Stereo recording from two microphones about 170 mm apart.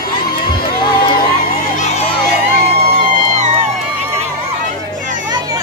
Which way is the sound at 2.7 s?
40° right (ahead or behind).